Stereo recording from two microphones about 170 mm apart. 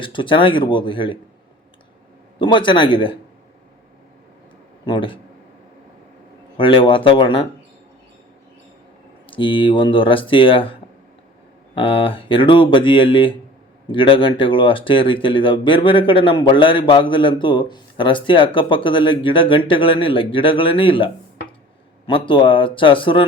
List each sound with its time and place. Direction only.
0.0 s speech: 30° left (ahead or behind)
2.4 s speech: 30° left (ahead or behind)
4.9 s speech: 30° left (ahead or behind)
6.6 s speech: 30° left (ahead or behind)
9.2 s speech: 30° left (ahead or behind)